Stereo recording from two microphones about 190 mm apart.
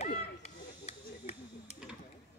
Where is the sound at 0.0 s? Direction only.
35° left (ahead or behind).